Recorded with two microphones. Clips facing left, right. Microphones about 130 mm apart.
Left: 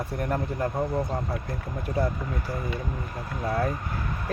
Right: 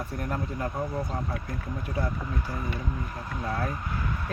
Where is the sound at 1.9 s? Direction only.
40° left (ahead or behind).